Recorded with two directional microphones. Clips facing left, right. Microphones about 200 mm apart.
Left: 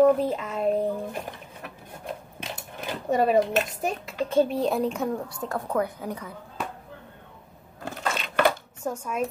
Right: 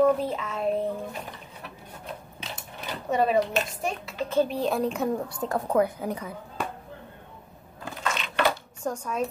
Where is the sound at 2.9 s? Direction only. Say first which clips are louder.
Left 2 dB; 45° left (ahead or behind).